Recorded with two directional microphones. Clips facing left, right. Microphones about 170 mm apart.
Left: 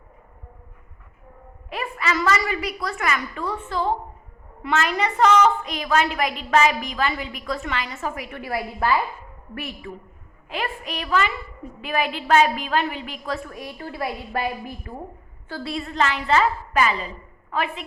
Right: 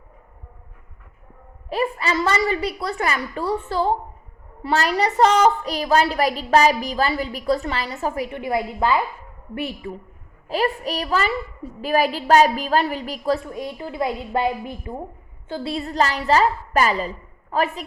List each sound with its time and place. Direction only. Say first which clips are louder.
1.7 s a woman's voice: right 4 dB; 30° right (ahead or behind)